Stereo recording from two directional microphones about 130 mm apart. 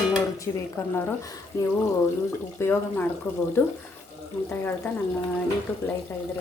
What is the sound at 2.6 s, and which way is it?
Speech, 15° left (ahead or behind).